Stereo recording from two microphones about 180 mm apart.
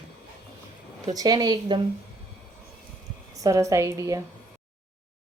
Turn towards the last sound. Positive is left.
turn(degrees=-15)  # may be behind; listen again after turning